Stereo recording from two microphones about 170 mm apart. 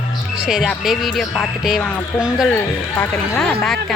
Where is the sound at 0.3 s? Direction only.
5° right (ahead or behind).